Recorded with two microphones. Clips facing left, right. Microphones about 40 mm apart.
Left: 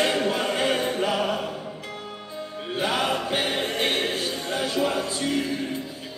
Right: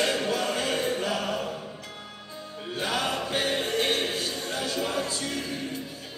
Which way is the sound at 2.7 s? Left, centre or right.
Left.